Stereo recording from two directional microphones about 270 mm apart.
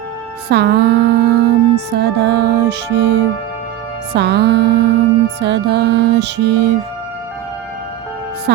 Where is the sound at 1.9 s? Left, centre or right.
Right.